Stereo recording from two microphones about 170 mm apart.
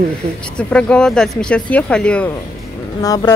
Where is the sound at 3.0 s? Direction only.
20° left (ahead or behind).